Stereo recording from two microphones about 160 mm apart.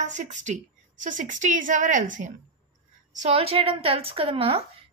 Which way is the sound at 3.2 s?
40° right (ahead or behind).